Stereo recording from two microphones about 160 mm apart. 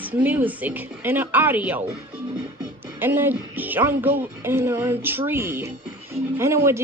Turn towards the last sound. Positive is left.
turn(degrees=-15)  # may be behind; listen again after turning